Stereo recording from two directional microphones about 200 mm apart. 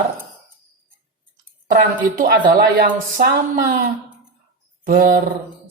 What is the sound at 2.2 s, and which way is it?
Speech, 50° right (ahead or behind).